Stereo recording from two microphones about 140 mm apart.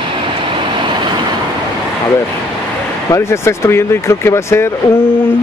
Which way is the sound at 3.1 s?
20° left (ahead or behind).